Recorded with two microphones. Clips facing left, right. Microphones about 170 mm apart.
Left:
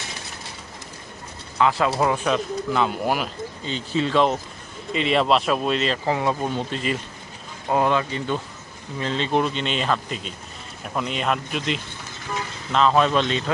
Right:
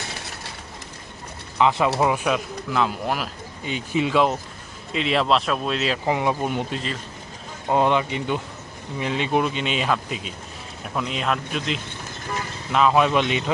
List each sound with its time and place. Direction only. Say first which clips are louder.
1.5 s speech: right 1 dB; 20° right (ahead or behind); by 3.2 s centre (ahead or behind)
3.6 s speech: right 1 dB; 10° right (ahead or behind)
6.1 s speech: right 2 dB; 15° right (ahead or behind)